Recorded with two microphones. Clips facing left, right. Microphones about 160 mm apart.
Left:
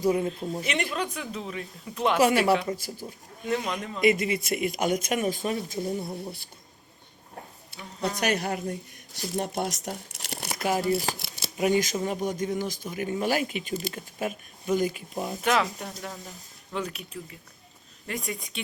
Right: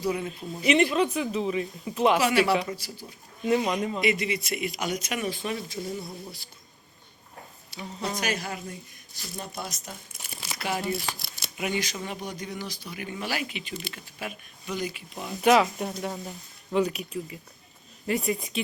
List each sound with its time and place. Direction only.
0.0 s speech: 45° left (ahead or behind)
0.6 s speech: 5° right (ahead or behind)
2.2 s speech: 45° left (ahead or behind)
3.4 s speech: 10° right (ahead or behind)
4.0 s speech: 45° left (ahead or behind)
6.0 s a sound: 25° left (ahead or behind)
7.8 s speech: 10° right (ahead or behind)
8.2 s a woman's voice: 60° left (ahead or behind)
9.3 s speech: 70° left (ahead or behind)
10.1 s crumpling: 75° left (ahead or behind); by 10.8 s 45° left (ahead or behind)
10.9 s speech: 35° left (ahead or behind)
15.4 s speech: 5° right (ahead or behind)